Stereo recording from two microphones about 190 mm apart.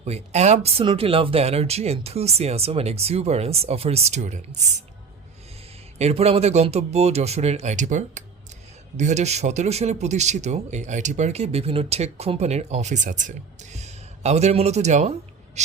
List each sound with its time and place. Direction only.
0.0 s speech: 35° right (ahead or behind)
6.0 s speech: 35° right (ahead or behind)
15.6 s a sound: 35° right (ahead or behind)